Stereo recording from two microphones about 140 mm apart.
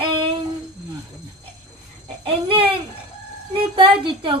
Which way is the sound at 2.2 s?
40° right (ahead or behind).